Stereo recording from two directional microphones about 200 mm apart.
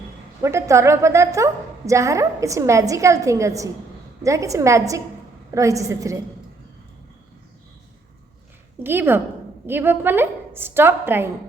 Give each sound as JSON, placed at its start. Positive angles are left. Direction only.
{"t": 0.4, "sound": "a woman's voice", "side_deg": -15}
{"t": 8.8, "sound": "a woman's voice", "side_deg": -10}